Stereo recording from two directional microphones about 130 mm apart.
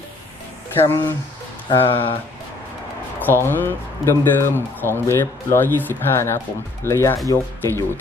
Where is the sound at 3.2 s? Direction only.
15° left (ahead or behind).